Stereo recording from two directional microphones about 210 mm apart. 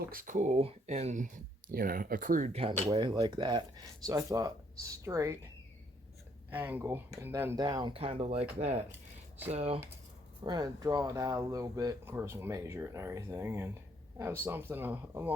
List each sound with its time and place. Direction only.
0.1 s speech: 40° right (ahead or behind); by 5.4 s 15° right (ahead or behind)
6.5 s speech: 10° right (ahead or behind); by 9.8 s 30° right (ahead or behind)
10.4 s speech: 20° right (ahead or behind)